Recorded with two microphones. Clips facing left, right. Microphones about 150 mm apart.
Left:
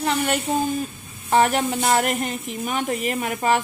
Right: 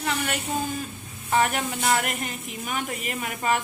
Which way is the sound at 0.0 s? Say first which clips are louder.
Left 6 dB; 35° left (ahead or behind).